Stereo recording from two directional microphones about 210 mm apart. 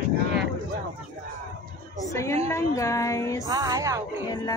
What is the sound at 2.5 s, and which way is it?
Speech, 15° left (ahead or behind).